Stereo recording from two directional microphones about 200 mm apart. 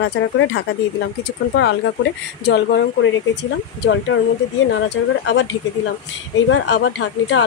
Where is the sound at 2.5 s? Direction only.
60° left (ahead or behind).